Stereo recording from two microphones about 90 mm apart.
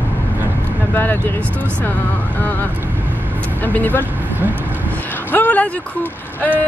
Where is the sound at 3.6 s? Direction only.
20° left (ahead or behind).